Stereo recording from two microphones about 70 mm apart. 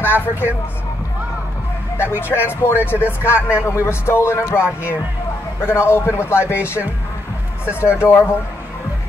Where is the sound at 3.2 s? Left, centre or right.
Left.